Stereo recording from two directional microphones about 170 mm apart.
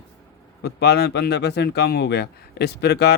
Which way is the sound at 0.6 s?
75° left (ahead or behind).